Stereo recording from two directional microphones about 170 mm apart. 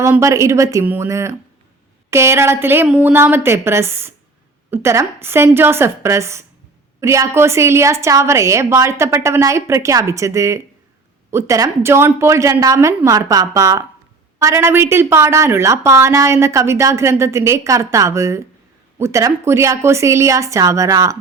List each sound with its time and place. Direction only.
0.0 s a woman's voice: 15° right (ahead or behind)